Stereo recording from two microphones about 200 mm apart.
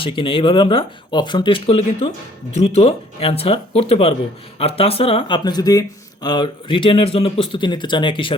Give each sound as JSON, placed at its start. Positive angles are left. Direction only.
{"t": 0.0, "sound": "speech", "side_deg": 25}